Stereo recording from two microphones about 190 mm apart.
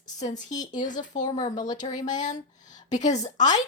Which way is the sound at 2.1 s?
40° left (ahead or behind).